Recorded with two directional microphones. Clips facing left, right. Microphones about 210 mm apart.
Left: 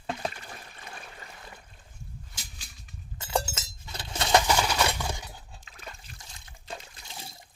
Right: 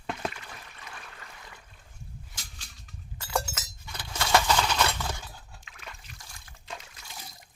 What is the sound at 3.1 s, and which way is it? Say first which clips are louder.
Chink: left 2 dB; 25° left (ahead or behind).